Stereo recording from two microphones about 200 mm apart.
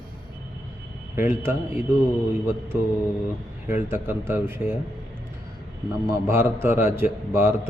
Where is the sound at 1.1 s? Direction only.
10° right (ahead or behind).